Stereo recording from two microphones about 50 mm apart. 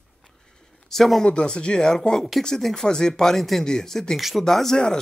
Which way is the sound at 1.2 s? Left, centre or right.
Centre.